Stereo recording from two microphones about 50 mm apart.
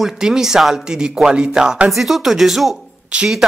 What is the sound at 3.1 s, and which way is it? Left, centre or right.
Speech, centre.